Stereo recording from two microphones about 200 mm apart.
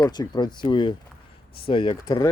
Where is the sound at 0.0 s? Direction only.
20° left (ahead or behind).